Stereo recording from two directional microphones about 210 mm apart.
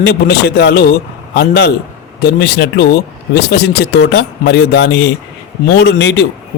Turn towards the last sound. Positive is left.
turn(degrees=55)  # may be behind; listen again after turning